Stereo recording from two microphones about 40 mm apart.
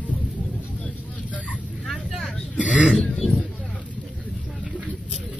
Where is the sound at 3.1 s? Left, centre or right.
Centre.